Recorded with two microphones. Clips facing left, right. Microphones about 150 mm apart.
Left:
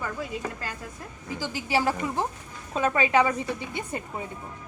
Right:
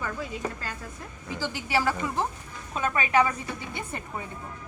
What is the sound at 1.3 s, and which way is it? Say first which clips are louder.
Speech: left 1 dB; 15° left (ahead or behind).